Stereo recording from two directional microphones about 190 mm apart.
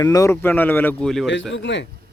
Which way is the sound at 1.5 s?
70° left (ahead or behind).